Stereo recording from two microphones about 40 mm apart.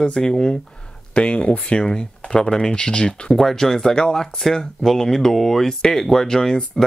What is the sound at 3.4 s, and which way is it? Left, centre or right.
Speech, centre.